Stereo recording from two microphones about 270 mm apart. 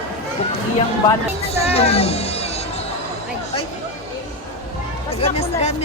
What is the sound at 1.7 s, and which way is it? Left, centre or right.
Music, left.